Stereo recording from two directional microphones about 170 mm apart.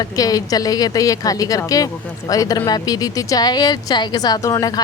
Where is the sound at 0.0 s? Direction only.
20° left (ahead or behind).